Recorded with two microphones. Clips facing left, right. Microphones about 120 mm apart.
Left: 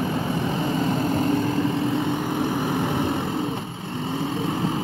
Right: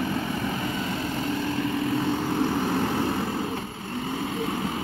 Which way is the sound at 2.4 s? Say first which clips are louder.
Even; 15° left (ahead or behind).